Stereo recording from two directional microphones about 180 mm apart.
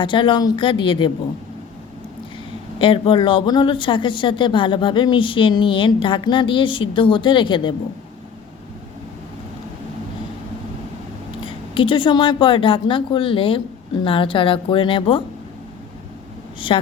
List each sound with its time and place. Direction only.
0.0 s speech: 25° left (ahead or behind)
2.7 s speech: 30° left (ahead or behind)
11.4 s speech: 30° left (ahead or behind)